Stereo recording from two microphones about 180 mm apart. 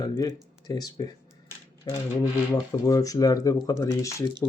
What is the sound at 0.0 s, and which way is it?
Speech, 20° left (ahead or behind).